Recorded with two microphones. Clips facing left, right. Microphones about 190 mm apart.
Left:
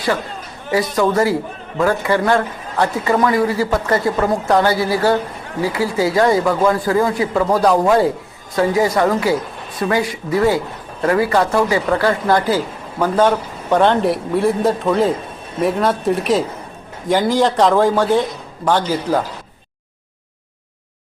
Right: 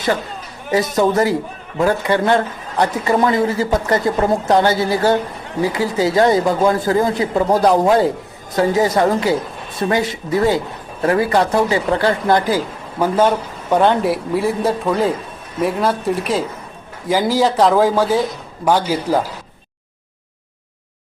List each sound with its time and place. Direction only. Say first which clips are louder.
0.7 s a man's voice: right 1 dB; 20° right (ahead or behind)